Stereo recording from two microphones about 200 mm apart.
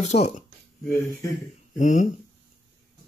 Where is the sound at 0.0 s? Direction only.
35° left (ahead or behind).